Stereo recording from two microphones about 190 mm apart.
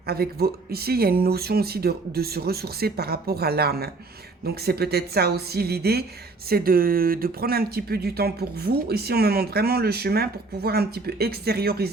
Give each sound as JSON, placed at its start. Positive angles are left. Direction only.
{"t": 0.0, "sound": "speech", "side_deg": -55}